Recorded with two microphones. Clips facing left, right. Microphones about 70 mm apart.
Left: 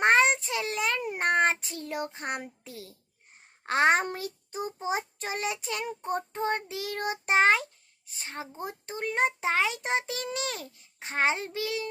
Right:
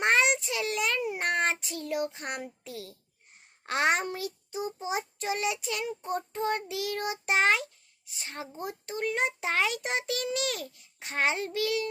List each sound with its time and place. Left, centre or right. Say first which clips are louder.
0.0 s child singing: left 3 dB; left
3.6 s a child's voice: left 4 dB; left
4.0 s child singing: even; left